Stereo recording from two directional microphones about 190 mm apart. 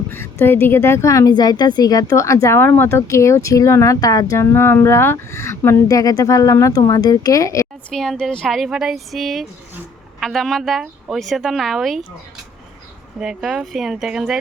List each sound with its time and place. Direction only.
0.1 s a woman's voice: 10° left (ahead or behind)
7.9 s a woman's voice: centre (ahead or behind)
13.1 s a woman's voice: 5° right (ahead or behind)